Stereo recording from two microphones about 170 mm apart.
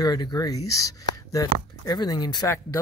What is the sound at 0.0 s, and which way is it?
Speech, 25° left (ahead or behind).